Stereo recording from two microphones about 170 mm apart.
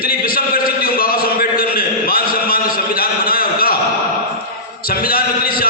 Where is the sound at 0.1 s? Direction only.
60° left (ahead or behind).